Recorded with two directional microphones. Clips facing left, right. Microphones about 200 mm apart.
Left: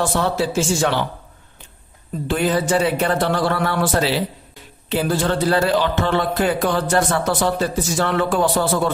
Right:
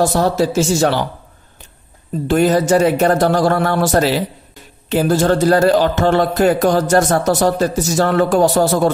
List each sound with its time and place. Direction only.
0.0 s speech: 40° right (ahead or behind)
2.2 s speech: 45° right (ahead or behind)